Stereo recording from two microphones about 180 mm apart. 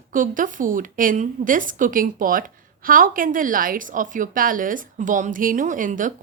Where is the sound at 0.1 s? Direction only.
50° right (ahead or behind).